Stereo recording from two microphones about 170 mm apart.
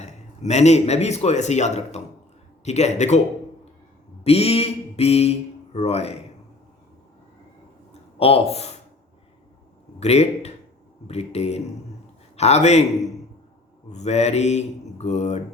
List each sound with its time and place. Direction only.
0.0 s a man's voice: 40° left (ahead or behind)
4.2 s speech: 35° left (ahead or behind)
8.2 s speech: 35° left (ahead or behind)
10.0 s speech: 40° left (ahead or behind)